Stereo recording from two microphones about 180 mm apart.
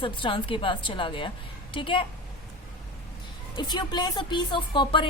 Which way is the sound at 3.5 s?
25° left (ahead or behind).